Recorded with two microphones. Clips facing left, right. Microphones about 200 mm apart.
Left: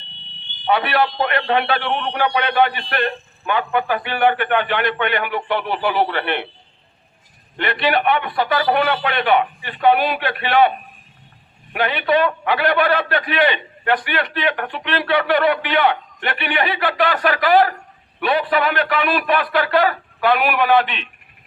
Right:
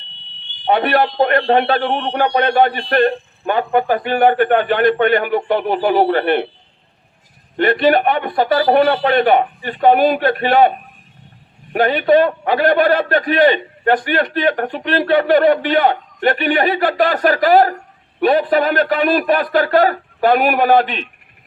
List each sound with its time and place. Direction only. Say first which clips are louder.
0.7 s a man's voice: right 3 dB; 45° right (ahead or behind)
7.5 s a man's voice: right 7 dB; 45° right (ahead or behind)